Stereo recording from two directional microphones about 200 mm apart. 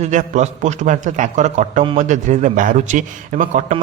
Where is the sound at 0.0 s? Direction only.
35° right (ahead or behind).